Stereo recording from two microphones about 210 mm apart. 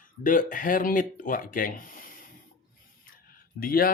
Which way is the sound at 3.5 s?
45° left (ahead or behind).